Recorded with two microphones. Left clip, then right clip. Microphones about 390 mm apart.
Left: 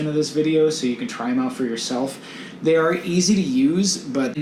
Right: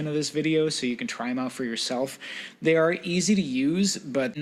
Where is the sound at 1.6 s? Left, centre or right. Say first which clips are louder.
Left 4 dB; right.